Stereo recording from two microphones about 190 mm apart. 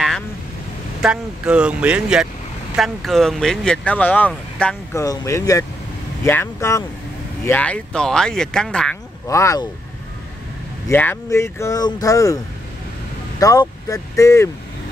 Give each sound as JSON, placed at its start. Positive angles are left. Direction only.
{"t": 1.0, "sound": "speech", "side_deg": -5}
{"t": 5.0, "sound": "speech", "side_deg": 15}
{"t": 9.3, "sound": "speech", "side_deg": 15}
{"t": 10.9, "sound": "speech", "side_deg": 10}
{"t": 13.4, "sound": "speech", "side_deg": 20}